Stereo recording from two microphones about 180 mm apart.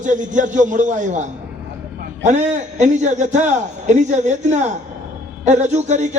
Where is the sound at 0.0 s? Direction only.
45° right (ahead or behind).